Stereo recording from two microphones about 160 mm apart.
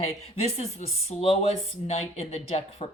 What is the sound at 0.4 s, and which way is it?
Speech, 45° left (ahead or behind).